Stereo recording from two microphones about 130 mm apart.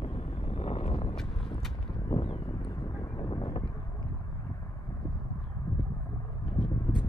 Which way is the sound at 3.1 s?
30° left (ahead or behind).